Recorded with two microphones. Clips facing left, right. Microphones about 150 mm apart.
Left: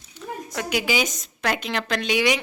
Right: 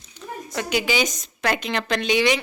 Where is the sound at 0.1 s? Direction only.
5° left (ahead or behind).